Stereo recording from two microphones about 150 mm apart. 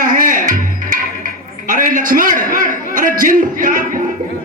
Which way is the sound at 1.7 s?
60° right (ahead or behind).